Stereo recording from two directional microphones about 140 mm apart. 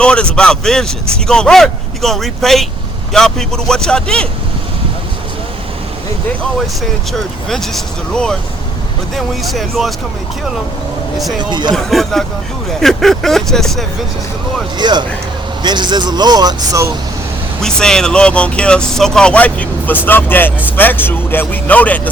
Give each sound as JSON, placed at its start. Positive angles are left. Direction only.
{"t": 0.0, "sound": "speech", "side_deg": 5}
{"t": 7.1, "sound": "speech", "side_deg": 0}
{"t": 11.3, "sound": "speech", "side_deg": -30}
{"t": 11.7, "sound": "speech", "side_deg": 0}
{"t": 14.8, "sound": "speech", "side_deg": -30}
{"t": 17.6, "sound": "speech", "side_deg": 5}